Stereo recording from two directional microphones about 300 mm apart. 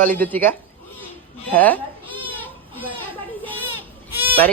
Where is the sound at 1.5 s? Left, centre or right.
Centre.